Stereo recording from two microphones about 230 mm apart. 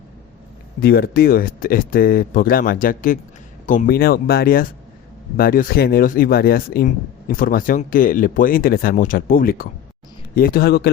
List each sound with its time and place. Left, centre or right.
0.8 s a man's voice: left